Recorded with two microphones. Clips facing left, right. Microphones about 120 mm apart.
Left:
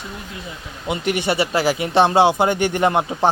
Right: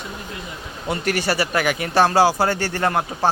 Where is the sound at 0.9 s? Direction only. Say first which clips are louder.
Left 1 dB; 20° left (ahead or behind).